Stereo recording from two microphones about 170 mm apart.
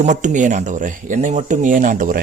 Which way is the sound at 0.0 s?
45° right (ahead or behind).